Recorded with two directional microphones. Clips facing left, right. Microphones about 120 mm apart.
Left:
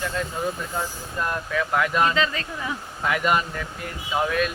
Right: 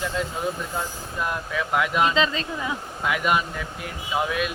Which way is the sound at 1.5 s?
10° right (ahead or behind).